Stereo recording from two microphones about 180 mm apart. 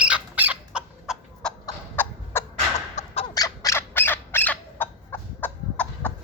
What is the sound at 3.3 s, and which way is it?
Squawk, 20° left (ahead or behind).